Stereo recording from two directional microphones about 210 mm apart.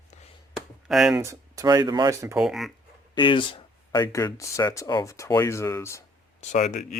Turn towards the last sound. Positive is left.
turn(degrees=35)  # may be behind; listen again after turning